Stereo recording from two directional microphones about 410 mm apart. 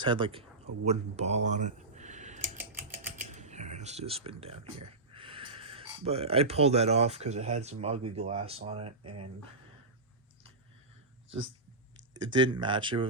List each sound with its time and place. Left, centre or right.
0.0 s speech: centre
3.3 s a sound: centre
5.1 s speech: centre
12.1 s speech: centre